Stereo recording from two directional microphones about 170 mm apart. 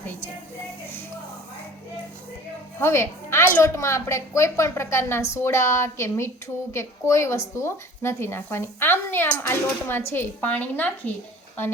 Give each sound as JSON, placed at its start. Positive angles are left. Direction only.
{"t": 2.7, "sound": "a woman's voice", "side_deg": 15}